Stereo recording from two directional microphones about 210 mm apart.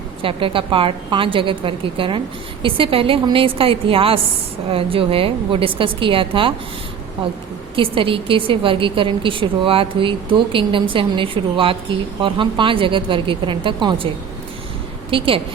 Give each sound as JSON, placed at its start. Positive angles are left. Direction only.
{"t": 0.2, "sound": "a woman's voice", "side_deg": -25}
{"t": 7.8, "sound": "a woman's voice", "side_deg": -25}
{"t": 15.1, "sound": "a woman's voice", "side_deg": -25}